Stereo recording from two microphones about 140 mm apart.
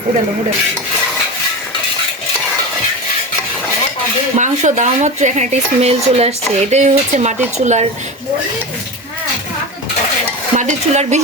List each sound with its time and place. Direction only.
4.4 s speech: 60° right (ahead or behind)
10.5 s stir: 60° right (ahead or behind)